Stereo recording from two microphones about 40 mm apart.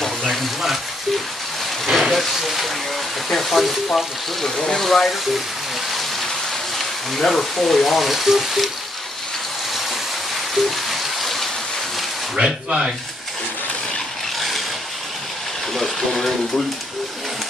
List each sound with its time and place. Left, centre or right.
0.0 s a sound: centre
1.9 s speech: centre
7.2 s speech: centre
10.5 s a sound: centre
12.6 s speech: centre
15.7 s speech: centre